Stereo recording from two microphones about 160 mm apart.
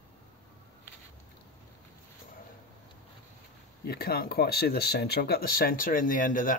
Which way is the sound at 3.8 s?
70° left (ahead or behind).